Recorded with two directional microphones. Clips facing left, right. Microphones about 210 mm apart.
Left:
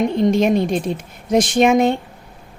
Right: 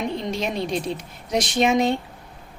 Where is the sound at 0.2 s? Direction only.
50° left (ahead or behind).